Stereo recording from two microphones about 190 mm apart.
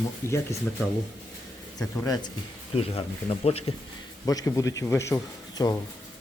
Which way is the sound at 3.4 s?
30° left (ahead or behind).